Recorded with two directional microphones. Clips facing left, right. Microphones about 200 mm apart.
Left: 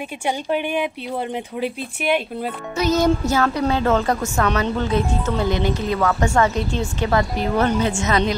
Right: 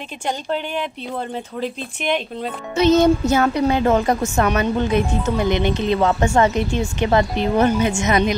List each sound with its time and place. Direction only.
0.3 s speech: 10° left (ahead or behind)
2.7 s a woman's voice: 25° right (ahead or behind)